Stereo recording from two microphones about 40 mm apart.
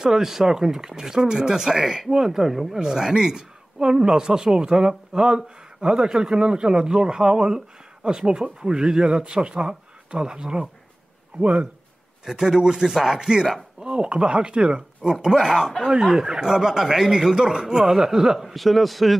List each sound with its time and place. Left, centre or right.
0.0 s speech: centre
11.4 s speech: right
12.3 s speech: centre
15.2 s speech: centre
18.5 s a man's voice: centre